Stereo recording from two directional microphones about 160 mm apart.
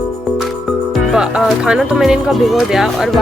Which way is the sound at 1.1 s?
5° right (ahead or behind).